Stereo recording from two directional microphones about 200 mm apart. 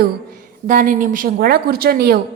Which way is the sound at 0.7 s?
40° right (ahead or behind).